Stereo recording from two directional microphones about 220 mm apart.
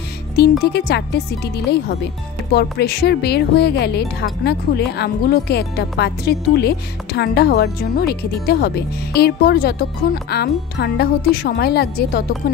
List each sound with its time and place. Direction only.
0.4 s speech: 50° left (ahead or behind)